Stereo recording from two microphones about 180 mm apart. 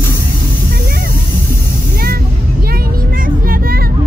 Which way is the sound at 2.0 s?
55° right (ahead or behind).